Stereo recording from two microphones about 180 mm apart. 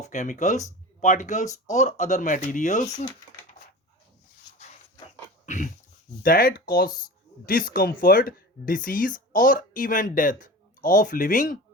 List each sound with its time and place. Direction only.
0.0 s speech: 40° left (ahead or behind)
5.5 s dog: 45° left (ahead or behind)
6.2 s speech: 55° left (ahead or behind)